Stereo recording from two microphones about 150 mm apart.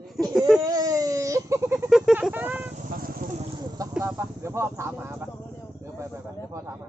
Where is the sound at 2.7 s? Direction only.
65° right (ahead or behind).